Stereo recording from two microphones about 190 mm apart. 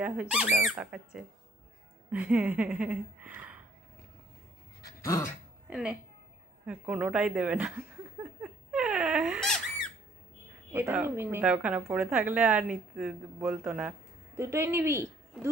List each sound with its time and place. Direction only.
0.0 s a woman's voice: 5° right (ahead or behind)
5.0 s speech: 15° left (ahead or behind)
5.7 s a woman's voice: 5° right (ahead or behind)
6.6 s a sound: 5° right (ahead or behind)
10.7 s a woman's voice: 10° right (ahead or behind)